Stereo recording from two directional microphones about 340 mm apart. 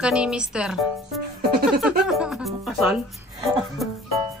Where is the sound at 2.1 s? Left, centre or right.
Centre.